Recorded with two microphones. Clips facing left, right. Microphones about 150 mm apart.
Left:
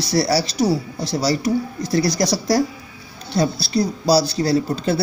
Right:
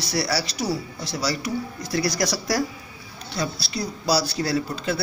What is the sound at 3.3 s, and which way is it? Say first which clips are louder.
Speech: left 9 dB; 30° left (ahead or behind).